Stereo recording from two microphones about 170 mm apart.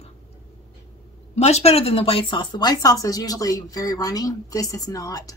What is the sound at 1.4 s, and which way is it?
Speech, 40° left (ahead or behind).